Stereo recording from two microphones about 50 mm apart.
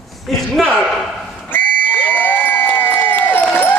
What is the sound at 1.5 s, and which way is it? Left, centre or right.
Crowd, left.